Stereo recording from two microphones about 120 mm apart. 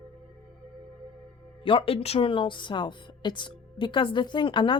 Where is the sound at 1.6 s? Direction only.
45° left (ahead or behind).